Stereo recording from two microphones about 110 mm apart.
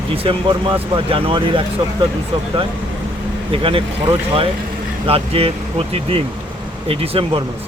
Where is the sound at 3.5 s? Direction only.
60° right (ahead or behind).